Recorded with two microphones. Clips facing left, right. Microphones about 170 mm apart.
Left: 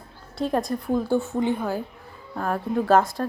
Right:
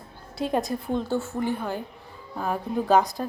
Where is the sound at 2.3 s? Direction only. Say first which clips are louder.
Left 2 dB; 5° right (ahead or behind).